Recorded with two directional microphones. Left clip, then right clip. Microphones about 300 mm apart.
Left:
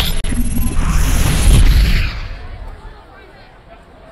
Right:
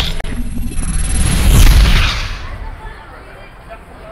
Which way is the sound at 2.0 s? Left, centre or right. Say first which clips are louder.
Right 9 dB; right.